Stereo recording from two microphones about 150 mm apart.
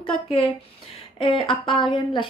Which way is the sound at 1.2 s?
35° left (ahead or behind).